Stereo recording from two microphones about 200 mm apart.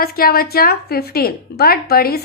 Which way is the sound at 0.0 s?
50° left (ahead or behind).